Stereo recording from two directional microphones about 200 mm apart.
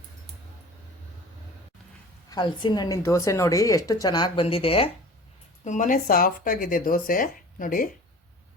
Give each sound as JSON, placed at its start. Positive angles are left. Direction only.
{"t": 2.3, "sound": "speech", "side_deg": 20}
{"t": 5.6, "sound": "speech", "side_deg": 40}